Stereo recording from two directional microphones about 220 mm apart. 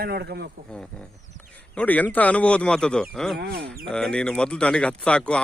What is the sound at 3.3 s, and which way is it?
Speech, 50° right (ahead or behind).